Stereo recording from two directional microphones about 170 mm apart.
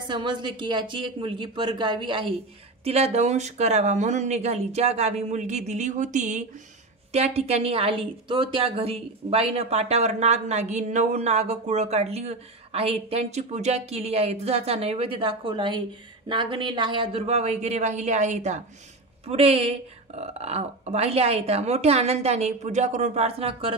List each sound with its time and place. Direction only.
0.1 s speech: 30° right (ahead or behind)